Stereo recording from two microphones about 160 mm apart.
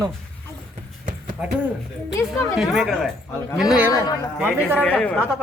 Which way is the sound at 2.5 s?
Centre (ahead or behind).